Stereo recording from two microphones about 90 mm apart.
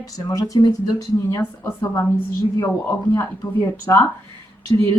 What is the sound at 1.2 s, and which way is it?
Speech, 30° left (ahead or behind).